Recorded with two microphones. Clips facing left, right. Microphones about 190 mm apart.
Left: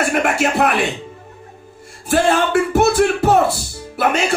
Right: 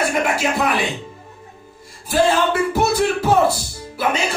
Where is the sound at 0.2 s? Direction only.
65° left (ahead or behind).